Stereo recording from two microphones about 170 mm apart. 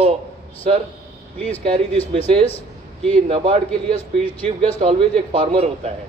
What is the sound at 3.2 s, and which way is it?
Speech, 35° right (ahead or behind).